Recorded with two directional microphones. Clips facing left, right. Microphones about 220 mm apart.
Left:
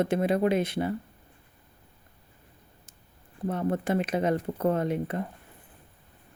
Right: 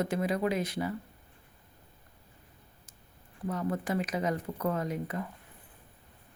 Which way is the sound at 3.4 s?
30° left (ahead or behind).